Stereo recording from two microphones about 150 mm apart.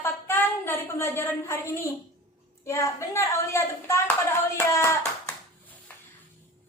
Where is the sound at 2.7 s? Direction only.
20° left (ahead or behind).